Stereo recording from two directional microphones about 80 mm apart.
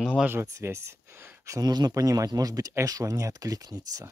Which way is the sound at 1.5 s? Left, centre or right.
Right.